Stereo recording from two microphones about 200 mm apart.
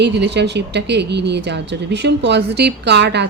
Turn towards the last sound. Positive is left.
turn(degrees=-60)  # may be behind; listen again after turning